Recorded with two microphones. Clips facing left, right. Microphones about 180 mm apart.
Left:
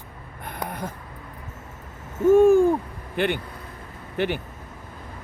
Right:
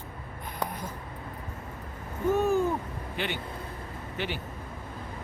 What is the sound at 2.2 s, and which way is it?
Hoot, 50° left (ahead or behind).